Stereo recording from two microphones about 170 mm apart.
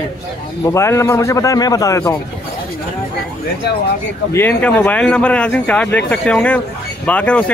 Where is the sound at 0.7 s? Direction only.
15° left (ahead or behind).